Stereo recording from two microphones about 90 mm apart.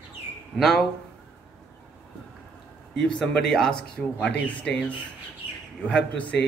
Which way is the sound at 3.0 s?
10° left (ahead or behind).